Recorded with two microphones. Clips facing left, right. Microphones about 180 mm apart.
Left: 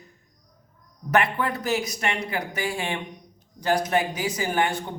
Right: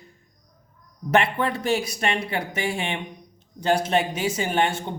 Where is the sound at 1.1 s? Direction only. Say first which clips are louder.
Right 2 dB; 25° right (ahead or behind).